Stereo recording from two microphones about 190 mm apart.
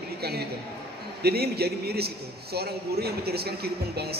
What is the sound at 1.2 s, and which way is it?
A man's voice, 55° right (ahead or behind).